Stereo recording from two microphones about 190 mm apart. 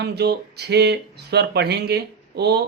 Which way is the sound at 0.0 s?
60° right (ahead or behind).